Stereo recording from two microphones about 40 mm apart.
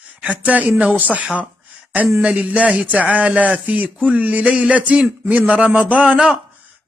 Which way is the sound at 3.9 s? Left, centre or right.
Right.